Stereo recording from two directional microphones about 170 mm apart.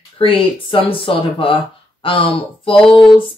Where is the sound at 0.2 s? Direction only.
30° left (ahead or behind).